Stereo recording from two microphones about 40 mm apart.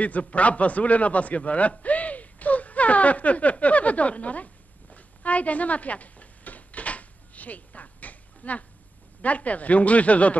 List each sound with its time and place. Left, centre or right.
0.0 s a man's voice: left
4.9 s a sound: left
9.2 s speech: left